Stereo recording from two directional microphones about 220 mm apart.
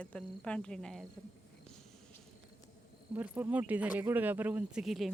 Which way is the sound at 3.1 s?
10° right (ahead or behind).